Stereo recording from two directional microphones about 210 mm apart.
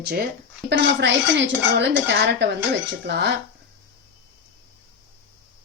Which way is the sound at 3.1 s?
55° right (ahead or behind).